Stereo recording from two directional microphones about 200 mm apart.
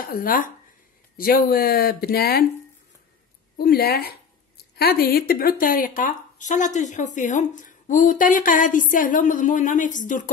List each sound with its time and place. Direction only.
0.0 s speech: 45° left (ahead or behind)
3.5 s speech: 50° left (ahead or behind)